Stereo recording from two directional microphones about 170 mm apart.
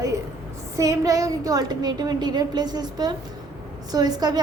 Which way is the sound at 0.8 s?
20° right (ahead or behind).